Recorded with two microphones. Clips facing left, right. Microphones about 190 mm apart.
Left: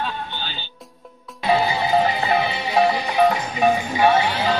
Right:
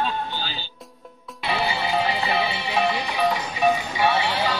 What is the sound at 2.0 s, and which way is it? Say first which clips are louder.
Music: left 3 dB; 45° left (ahead or behind).